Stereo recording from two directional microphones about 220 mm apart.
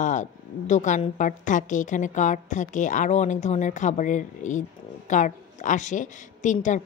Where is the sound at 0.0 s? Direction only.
35° left (ahead or behind).